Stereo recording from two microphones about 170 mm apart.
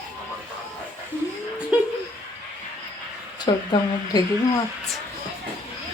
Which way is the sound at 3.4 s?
25° left (ahead or behind).